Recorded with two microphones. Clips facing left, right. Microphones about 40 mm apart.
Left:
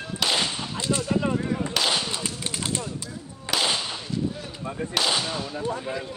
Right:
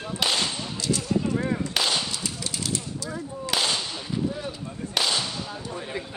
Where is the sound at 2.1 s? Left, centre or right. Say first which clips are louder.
Left 1 dB; left.